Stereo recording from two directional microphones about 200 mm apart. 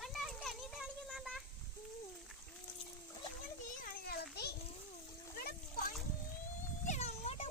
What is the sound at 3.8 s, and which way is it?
Children playing, 50° left (ahead or behind).